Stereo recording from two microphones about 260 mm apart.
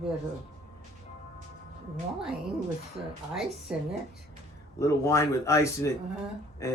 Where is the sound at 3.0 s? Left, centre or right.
Centre.